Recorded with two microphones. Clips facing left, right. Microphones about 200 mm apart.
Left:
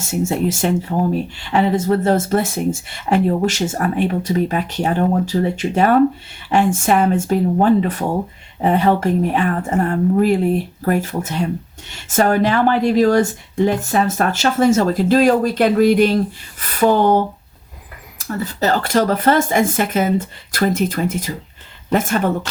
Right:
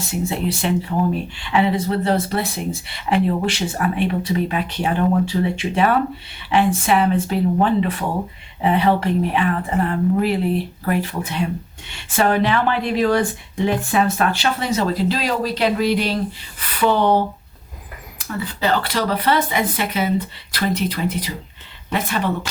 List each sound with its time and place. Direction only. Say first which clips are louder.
0.0 s speech: left 4 dB; 45° left (ahead or behind)
18.2 s speech: left 3 dB; 45° left (ahead or behind)